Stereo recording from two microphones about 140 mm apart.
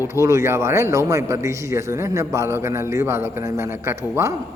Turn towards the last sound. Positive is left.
turn(degrees=-20)  # may be behind; listen again after turning